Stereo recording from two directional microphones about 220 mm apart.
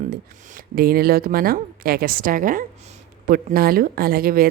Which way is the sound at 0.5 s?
45° right (ahead or behind).